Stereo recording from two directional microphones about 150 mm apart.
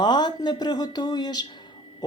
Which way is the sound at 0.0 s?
30° left (ahead or behind).